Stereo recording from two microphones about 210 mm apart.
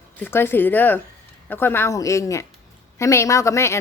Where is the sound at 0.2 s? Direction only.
10° left (ahead or behind).